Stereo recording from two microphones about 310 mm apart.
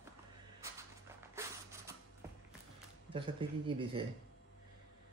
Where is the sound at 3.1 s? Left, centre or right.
Centre.